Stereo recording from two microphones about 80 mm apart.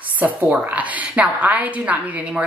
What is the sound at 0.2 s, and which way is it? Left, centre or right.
A woman's voice, centre.